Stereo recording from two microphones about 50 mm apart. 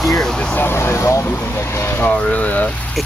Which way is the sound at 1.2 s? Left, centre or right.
Left.